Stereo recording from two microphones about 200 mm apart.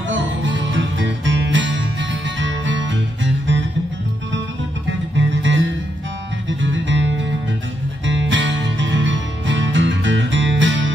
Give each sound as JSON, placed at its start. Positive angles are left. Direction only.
{"t": 0.1, "sound": "music", "side_deg": -65}
{"t": 5.1, "sound": "music", "side_deg": -65}
{"t": 6.6, "sound": "music", "side_deg": -70}